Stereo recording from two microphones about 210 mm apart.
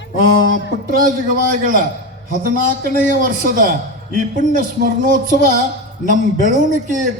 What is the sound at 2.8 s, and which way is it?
A man's voice, 40° right (ahead or behind).